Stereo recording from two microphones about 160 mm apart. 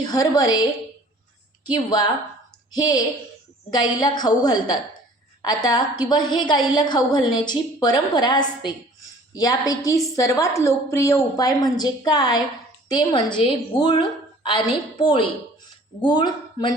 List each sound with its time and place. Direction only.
0.0 s a woman's voice: 25° left (ahead or behind)
1.7 s a woman's voice: 25° left (ahead or behind)